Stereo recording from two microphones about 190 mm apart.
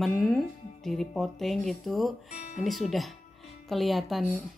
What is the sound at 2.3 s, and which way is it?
Speech, 40° left (ahead or behind).